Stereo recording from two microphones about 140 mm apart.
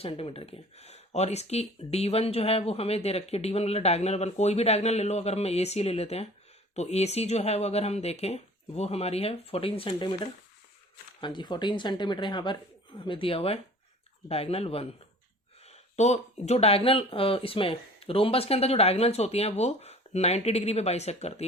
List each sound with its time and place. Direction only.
0.0 s speech: 40° left (ahead or behind)